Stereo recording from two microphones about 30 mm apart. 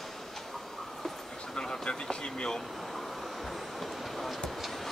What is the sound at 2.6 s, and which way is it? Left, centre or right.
Vehicle, centre.